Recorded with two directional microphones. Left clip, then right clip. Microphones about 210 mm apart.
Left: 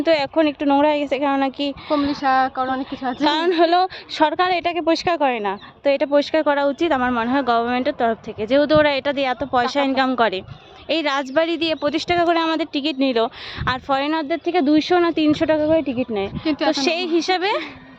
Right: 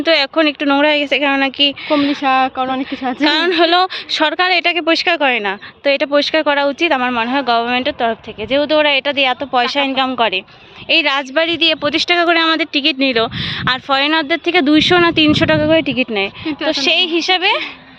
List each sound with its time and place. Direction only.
0.0 s a woman's voice: centre (ahead or behind)
2.2 s speech: 35° right (ahead or behind)
3.2 s a woman's voice: 5° left (ahead or behind)
16.6 s a woman's voice: 10° left (ahead or behind)